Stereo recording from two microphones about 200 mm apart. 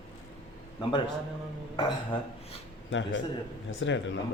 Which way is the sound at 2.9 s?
65° left (ahead or behind).